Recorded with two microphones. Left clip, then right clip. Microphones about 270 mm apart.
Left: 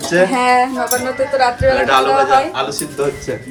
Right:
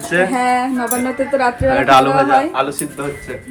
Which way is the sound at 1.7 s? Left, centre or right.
Centre.